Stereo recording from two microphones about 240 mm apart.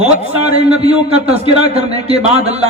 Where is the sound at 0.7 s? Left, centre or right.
Right.